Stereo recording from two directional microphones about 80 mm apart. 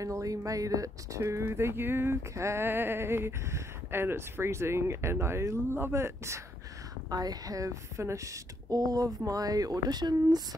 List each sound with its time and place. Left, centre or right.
0.0 s speech: right
7.1 s speech: right